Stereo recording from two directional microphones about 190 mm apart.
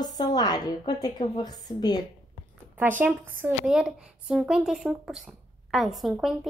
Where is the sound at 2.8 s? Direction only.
10° right (ahead or behind).